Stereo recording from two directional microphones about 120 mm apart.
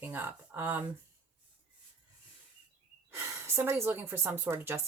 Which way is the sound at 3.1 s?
20° right (ahead or behind).